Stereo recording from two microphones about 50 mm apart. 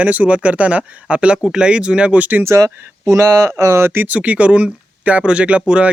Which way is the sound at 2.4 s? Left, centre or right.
Right.